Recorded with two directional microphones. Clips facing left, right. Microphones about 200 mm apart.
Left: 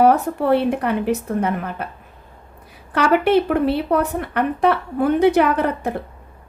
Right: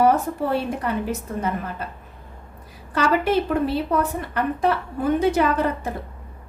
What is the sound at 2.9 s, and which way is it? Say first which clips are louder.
A woman's voice: left 4 dB; 65° left (ahead or behind).